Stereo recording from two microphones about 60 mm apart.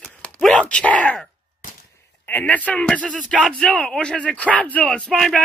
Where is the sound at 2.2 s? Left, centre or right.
Left.